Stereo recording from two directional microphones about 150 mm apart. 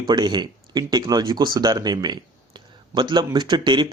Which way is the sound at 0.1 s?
30° right (ahead or behind).